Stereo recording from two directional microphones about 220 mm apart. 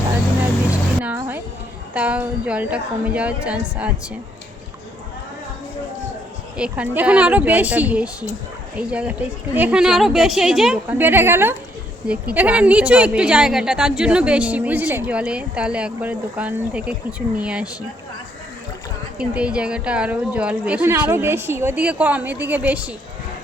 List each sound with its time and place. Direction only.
0.7 s music: 10° right (ahead or behind)
1.9 s a woman's voice: 5° right (ahead or behind)
6.6 s a woman's voice: 5° right (ahead or behind)
19.2 s a woman's voice: 5° right (ahead or behind)